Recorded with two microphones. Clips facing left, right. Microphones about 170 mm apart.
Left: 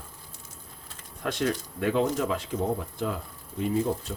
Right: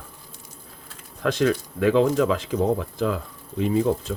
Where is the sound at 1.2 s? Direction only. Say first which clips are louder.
Right 7 dB; 90° right.